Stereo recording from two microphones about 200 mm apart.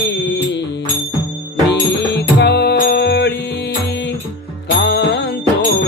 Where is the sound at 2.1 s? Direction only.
60° left (ahead or behind).